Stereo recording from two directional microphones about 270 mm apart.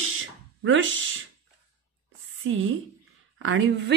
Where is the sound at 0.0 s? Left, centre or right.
Right.